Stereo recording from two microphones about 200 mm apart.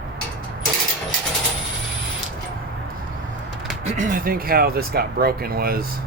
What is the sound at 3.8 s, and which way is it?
Speech, 35° right (ahead or behind).